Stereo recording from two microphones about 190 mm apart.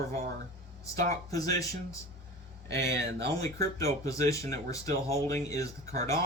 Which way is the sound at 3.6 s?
15° left (ahead or behind).